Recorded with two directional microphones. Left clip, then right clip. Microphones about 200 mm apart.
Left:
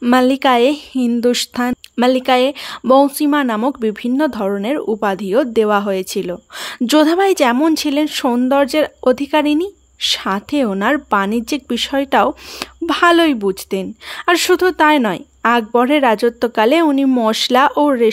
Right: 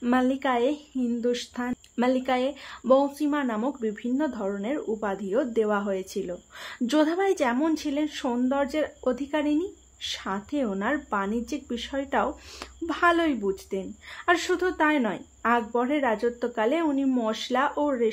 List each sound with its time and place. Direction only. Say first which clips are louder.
0.0 s a woman's voice: left 12 dB; 50° left (ahead or behind)